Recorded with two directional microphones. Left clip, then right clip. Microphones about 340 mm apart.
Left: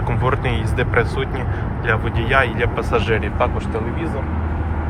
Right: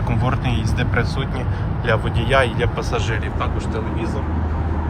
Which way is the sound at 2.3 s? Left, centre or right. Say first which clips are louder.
Left 1 dB; centre.